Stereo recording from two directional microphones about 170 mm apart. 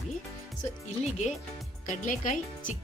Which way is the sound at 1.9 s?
50° left (ahead or behind).